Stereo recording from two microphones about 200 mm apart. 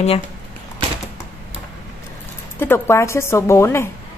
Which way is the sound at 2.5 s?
10° left (ahead or behind).